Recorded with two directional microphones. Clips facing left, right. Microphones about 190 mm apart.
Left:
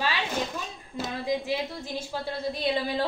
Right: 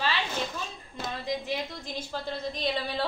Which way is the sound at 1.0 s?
10° left (ahead or behind).